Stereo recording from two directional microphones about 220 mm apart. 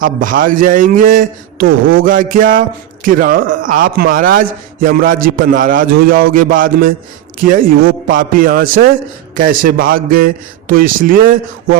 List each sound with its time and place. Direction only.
0.0 s a man's voice: 40° right (ahead or behind)